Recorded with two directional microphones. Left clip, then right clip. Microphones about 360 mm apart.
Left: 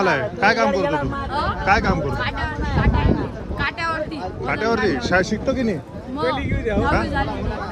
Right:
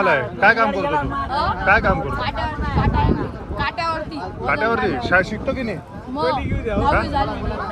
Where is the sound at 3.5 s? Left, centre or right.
Centre.